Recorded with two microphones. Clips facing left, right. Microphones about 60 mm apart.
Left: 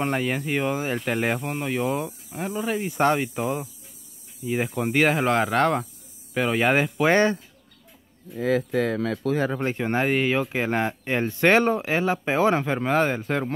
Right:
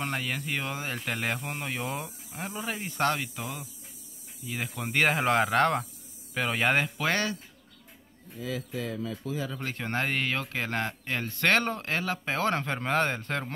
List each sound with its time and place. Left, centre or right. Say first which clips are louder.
0.0 s speech: left 7 dB; centre
3.0 s speech: left 6 dB; left
4.5 s speech: left 10 dB; centre
4.9 s speech: left 3 dB; centre
7.0 s speech: left 9 dB; left
8.4 s speech: left 12 dB; left
9.5 s speech: left 9 dB; left
9.8 s speech: left 6 dB; centre